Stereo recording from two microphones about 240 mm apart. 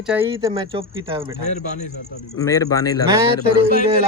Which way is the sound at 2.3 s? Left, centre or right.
Centre.